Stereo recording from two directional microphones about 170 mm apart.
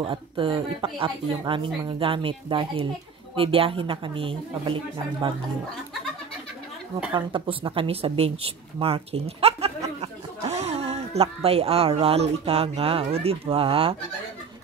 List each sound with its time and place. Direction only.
0.0 s speech: 30° right (ahead or behind)
7.1 s speech: 30° right (ahead or behind)